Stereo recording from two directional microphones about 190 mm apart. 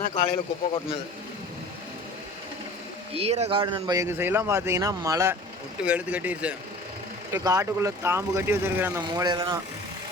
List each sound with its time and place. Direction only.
0.1 s speech: 30° left (ahead or behind)
3.2 s speech: 35° right (ahead or behind)